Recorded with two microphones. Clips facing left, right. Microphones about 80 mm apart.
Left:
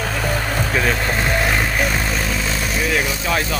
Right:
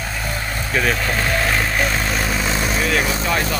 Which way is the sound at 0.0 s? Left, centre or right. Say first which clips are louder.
Left 4 dB; left.